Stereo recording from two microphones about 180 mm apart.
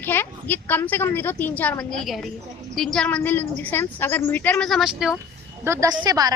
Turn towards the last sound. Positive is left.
turn(degrees=-20)  # may be behind; listen again after turning